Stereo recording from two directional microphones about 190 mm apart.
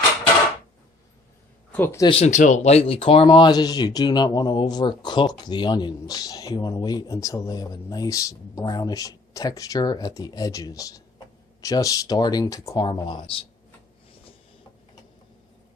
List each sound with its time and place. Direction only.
1.7 s speech: 10° left (ahead or behind)
2.0 s speech: 35° left (ahead or behind)